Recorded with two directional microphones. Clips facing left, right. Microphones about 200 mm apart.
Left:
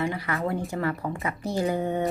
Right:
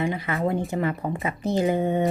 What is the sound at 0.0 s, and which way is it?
A woman's voice, 20° right (ahead or behind).